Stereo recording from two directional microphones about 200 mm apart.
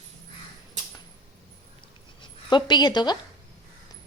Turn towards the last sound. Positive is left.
turn(degrees=20)  # may be behind; listen again after turning